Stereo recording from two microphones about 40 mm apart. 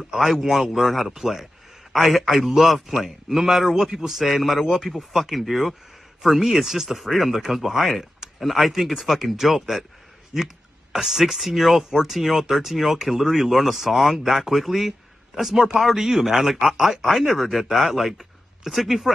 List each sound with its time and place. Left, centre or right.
0.1 s a man's voice: centre